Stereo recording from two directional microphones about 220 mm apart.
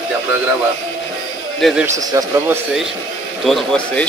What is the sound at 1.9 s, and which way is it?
Speech, 15° right (ahead or behind).